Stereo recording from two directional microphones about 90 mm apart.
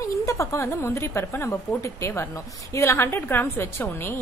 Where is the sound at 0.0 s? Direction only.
35° left (ahead or behind).